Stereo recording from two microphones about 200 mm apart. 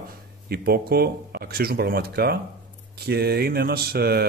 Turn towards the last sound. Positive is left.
turn(degrees=-50)  # may be behind; listen again after turning